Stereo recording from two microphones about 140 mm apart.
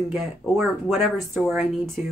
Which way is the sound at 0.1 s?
Centre (ahead or behind).